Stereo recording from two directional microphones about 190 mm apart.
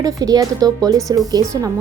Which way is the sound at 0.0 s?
20° right (ahead or behind).